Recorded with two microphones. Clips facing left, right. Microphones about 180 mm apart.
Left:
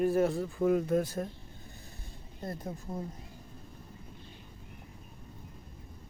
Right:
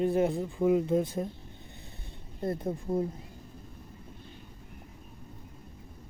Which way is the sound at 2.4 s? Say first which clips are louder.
Right 7 dB; 25° right (ahead or behind).